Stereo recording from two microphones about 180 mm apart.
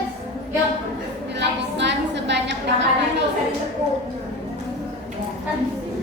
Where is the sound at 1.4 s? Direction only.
75° right (ahead or behind).